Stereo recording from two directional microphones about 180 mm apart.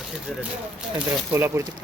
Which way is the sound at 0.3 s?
Centre (ahead or behind).